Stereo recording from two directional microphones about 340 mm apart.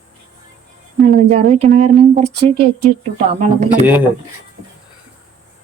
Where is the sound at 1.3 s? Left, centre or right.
Centre.